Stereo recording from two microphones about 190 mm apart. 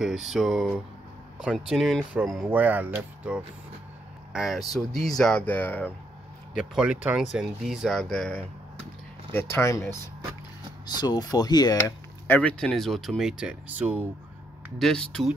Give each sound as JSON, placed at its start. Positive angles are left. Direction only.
{"t": 0.0, "sound": "speech", "side_deg": 0}
{"t": 6.6, "sound": "speech", "side_deg": -5}
{"t": 11.0, "sound": "speech", "side_deg": 20}
{"t": 12.3, "sound": "speech", "side_deg": 5}
{"t": 14.8, "sound": "speech", "side_deg": 5}